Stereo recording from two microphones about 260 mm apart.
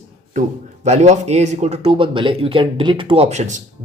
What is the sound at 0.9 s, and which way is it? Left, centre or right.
Speech, right.